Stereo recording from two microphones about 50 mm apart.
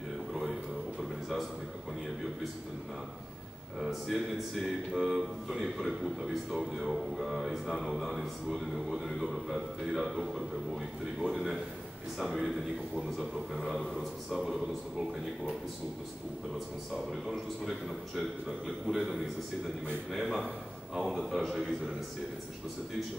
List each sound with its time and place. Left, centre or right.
3.8 s speech: centre
16.5 s speech: centre
18.9 s a man's voice: centre
20.1 s speech: centre